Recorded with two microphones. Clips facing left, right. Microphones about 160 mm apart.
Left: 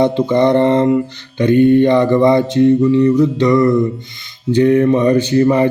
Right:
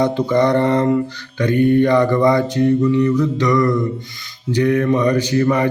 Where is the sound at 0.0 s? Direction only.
25° left (ahead or behind).